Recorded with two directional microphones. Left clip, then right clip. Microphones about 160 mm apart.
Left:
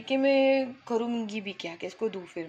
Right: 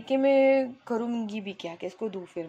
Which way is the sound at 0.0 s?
20° right (ahead or behind).